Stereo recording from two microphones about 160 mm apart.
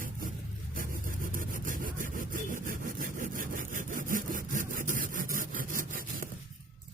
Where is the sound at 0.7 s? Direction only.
60° right (ahead or behind).